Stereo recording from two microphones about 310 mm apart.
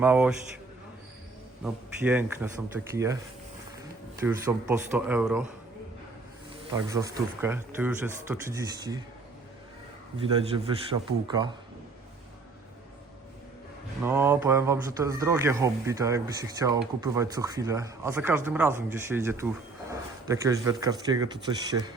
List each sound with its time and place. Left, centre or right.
0.0 s speech: centre
1.6 s speech: centre
4.2 s speech: centre
6.7 s speech: centre
10.2 s speech: centre
14.0 s speech: centre